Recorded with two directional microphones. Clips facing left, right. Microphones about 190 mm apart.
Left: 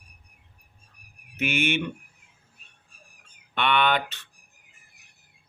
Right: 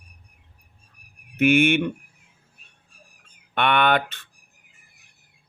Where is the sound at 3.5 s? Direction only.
55° right (ahead or behind).